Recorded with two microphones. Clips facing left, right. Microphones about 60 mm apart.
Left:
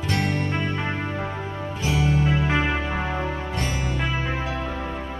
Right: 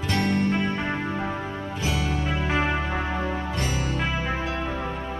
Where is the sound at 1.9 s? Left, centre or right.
Left.